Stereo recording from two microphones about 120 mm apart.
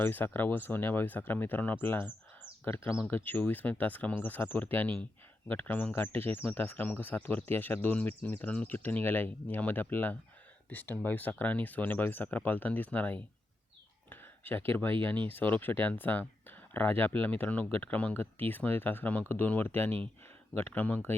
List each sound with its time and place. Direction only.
0.0 s speech: 15° left (ahead or behind)
14.1 s a sound: 15° left (ahead or behind)
15.3 s speech: 15° left (ahead or behind)